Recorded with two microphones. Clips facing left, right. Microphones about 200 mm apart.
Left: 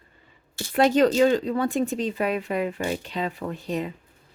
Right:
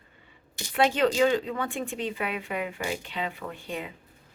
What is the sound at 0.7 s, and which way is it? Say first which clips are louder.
Speech: left 5 dB; 40° left (ahead or behind).